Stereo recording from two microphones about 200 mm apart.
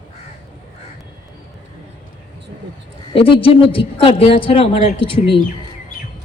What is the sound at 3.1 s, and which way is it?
A woman's voice, 25° left (ahead or behind).